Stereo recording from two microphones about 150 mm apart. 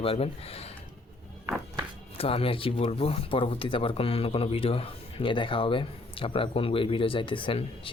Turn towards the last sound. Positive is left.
turn(degrees=35)  # may be behind; listen again after turning